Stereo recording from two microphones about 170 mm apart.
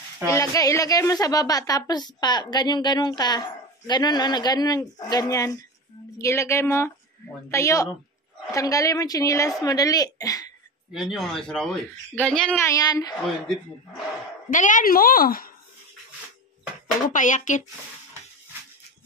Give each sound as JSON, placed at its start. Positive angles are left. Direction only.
{"t": 0.3, "sound": "a woman's voice", "side_deg": 20}
{"t": 10.9, "sound": "speech", "side_deg": 0}
{"t": 12.6, "sound": "a woman's voice", "side_deg": 20}
{"t": 14.5, "sound": "a woman's voice", "side_deg": 50}
{"t": 17.1, "sound": "speech", "side_deg": 50}